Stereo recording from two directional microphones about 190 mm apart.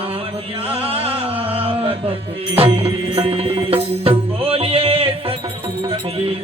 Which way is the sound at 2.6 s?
30° right (ahead or behind).